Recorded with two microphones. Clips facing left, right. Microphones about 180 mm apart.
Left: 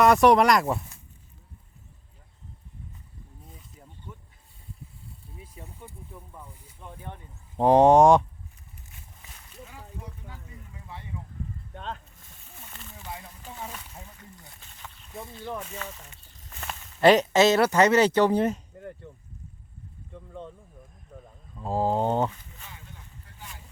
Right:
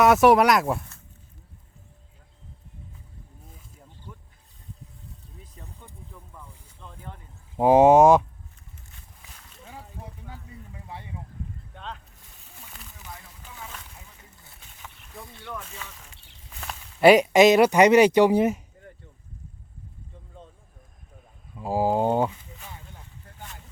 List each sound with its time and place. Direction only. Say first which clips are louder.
0.0 s speech: right 1 dB; centre (ahead or behind)
3.4 s a sound: left 1 dB; centre (ahead or behind)
5.6 s vehicle: left 2 dB; 10° left (ahead or behind)
6.1 s a sound: left 2 dB; 10° left (ahead or behind)
7.5 s speech: right 2 dB; 5° right (ahead or behind)
11.7 s boat: left 4 dB; 45° left (ahead or behind)
15.1 s snake: left 3 dB; 25° left (ahead or behind)
16.1 s a sound: right 1 dB; 75° right (ahead or behind)
16.5 s speech: even; centre (ahead or behind)
21.5 s speech: right 2 dB; 10° right (ahead or behind)